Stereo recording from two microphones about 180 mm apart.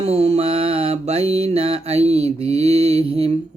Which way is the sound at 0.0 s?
35° right (ahead or behind).